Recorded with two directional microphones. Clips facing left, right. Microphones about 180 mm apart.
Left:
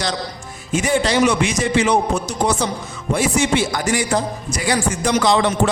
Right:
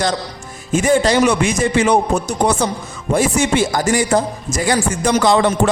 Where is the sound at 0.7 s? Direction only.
45° right (ahead or behind).